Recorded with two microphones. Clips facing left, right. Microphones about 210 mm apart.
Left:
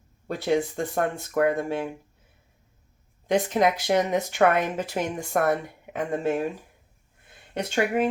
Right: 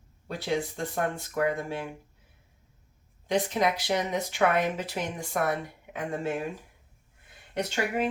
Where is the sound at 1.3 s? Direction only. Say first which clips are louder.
Left 8 dB; 50° left (ahead or behind).